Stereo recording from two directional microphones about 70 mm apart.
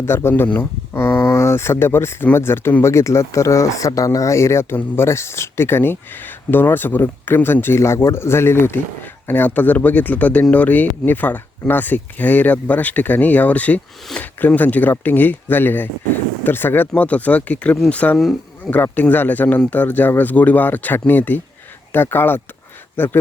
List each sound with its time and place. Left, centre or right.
0.0 s speech: left
0.4 s speech: left
0.9 s speech: left